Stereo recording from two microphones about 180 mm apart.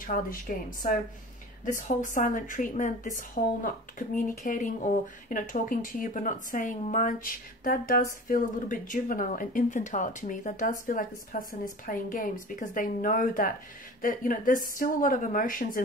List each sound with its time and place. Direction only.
0.0 s speech: 50° left (ahead or behind)
1.6 s speech: 45° left (ahead or behind)